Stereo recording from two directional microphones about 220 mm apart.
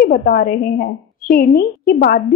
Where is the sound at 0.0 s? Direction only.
40° left (ahead or behind).